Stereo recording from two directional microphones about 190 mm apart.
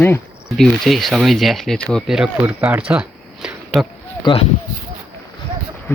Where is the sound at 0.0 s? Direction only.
10° left (ahead or behind).